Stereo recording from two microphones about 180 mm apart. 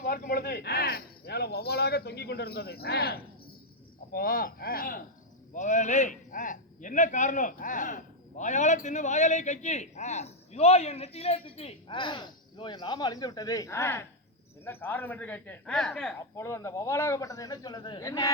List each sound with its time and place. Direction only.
0.0 s a man's voice: 55° left (ahead or behind); by 16.1 s 5° left (ahead or behind)
16.3 s speech: 15° left (ahead or behind)